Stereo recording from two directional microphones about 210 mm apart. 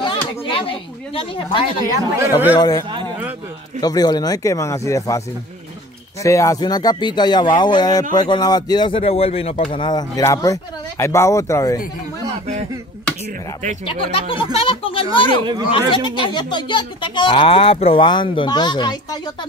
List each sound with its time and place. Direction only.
0.0 s speech: 25° left (ahead or behind)
3.8 s speech: 20° left (ahead or behind)
6.2 s speech: 15° left (ahead or behind)
13.8 s speech: 25° left (ahead or behind)